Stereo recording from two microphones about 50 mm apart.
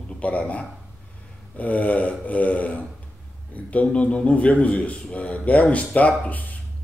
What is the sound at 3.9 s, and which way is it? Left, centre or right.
A man's voice, left.